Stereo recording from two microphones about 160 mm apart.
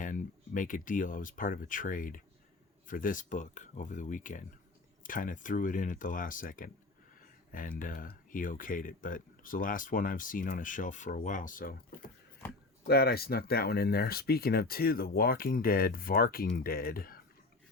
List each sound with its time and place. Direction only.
0.0 s speech: 55° left (ahead or behind)
12.8 s speech: 75° left (ahead or behind)